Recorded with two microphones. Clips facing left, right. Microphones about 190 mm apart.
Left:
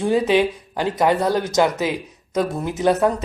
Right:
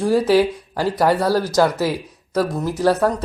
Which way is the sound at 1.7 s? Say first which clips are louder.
Right 2 dB; 20° left (ahead or behind).